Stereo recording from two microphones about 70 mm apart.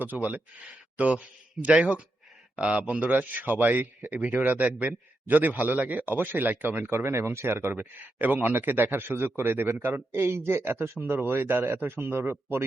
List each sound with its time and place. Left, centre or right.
0.0 s a man's voice: right